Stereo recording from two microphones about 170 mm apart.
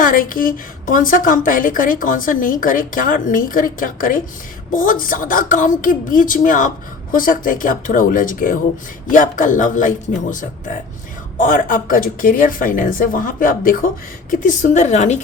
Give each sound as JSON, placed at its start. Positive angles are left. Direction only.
{"t": 0.0, "sound": "a woman's voice", "side_deg": 55}